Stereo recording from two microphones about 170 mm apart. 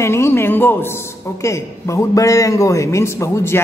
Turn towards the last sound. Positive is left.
turn(degrees=15)  # may be behind; listen again after turning